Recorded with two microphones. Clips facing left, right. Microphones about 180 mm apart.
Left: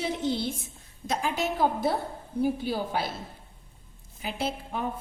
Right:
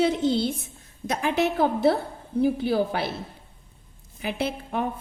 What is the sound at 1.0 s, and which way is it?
A woman's voice, 60° right (ahead or behind).